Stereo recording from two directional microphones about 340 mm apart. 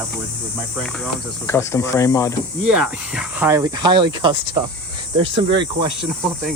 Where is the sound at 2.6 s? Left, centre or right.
Centre.